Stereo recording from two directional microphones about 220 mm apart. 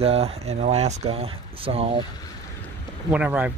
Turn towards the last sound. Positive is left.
turn(degrees=-5)  # may be behind; listen again after turning